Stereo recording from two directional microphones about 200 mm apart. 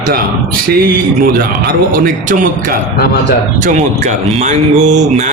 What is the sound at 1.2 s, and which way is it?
Speech, 45° right (ahead or behind).